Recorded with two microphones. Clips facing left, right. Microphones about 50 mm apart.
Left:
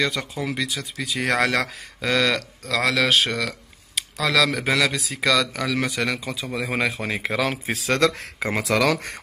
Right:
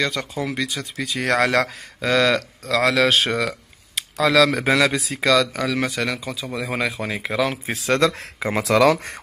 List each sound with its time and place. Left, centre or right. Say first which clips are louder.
0.0 s speech: right 1 dB; centre
5.9 s speech: even; centre
7.9 s speech: right 2 dB; right